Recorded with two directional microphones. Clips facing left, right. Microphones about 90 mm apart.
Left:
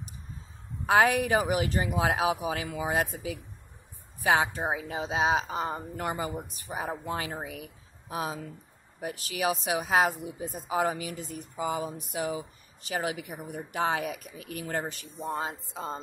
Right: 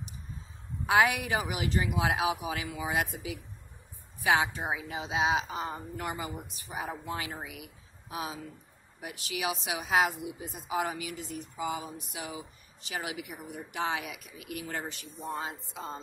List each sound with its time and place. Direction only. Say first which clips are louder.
0.8 s speech: left 3 dB; 40° left (ahead or behind)